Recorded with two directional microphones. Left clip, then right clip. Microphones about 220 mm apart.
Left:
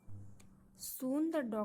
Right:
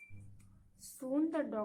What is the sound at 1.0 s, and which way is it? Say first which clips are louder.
Speech: right 1 dB; 45° left (ahead or behind).